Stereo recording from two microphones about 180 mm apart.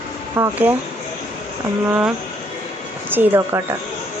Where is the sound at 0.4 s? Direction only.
10° right (ahead or behind).